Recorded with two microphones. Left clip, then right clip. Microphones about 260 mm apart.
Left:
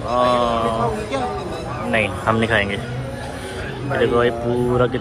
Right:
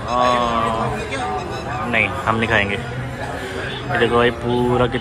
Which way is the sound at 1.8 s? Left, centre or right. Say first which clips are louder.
Even; centre.